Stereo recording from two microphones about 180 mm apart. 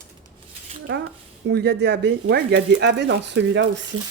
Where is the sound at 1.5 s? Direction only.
65° right (ahead or behind).